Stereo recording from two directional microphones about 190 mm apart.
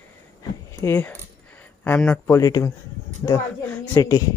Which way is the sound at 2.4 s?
20° left (ahead or behind).